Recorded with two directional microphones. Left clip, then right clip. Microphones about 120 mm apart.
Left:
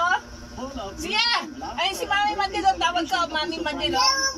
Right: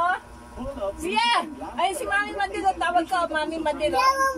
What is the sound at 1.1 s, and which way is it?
A child's voice, 40° right (ahead or behind).